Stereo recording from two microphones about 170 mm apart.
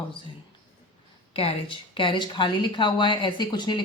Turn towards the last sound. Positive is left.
turn(degrees=25)  # may be behind; listen again after turning